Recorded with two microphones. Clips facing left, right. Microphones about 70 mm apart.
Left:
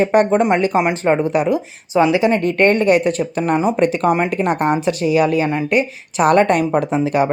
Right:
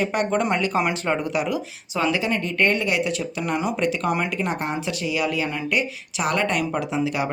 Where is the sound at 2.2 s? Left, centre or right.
Left.